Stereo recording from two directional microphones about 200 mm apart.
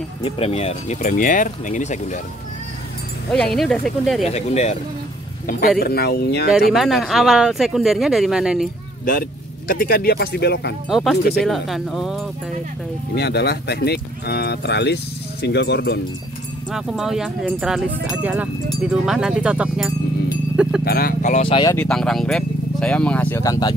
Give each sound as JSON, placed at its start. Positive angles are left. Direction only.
{"t": 0.2, "sound": "speech", "side_deg": 30}
{"t": 3.3, "sound": "speech", "side_deg": 5}
{"t": 4.3, "sound": "speech", "side_deg": 35}
{"t": 5.8, "sound": "speech", "side_deg": 50}
{"t": 6.7, "sound": "speech", "side_deg": 0}
{"t": 9.0, "sound": "speech", "side_deg": 45}
{"t": 10.9, "sound": "speech", "side_deg": 0}
{"t": 13.1, "sound": "speech", "side_deg": 55}
{"t": 16.7, "sound": "speech", "side_deg": 0}
{"t": 20.8, "sound": "speech", "side_deg": 50}
{"t": 21.7, "sound": "speech", "side_deg": 5}